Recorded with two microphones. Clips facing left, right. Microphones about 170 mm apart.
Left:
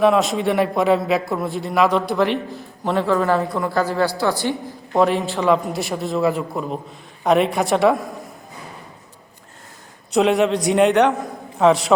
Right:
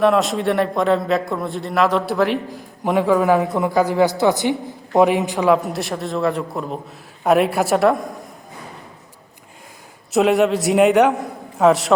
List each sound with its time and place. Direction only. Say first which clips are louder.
0.0 s a man's voice: even; centre (ahead or behind)
10.1 s a man's voice: right 1 dB; centre (ahead or behind)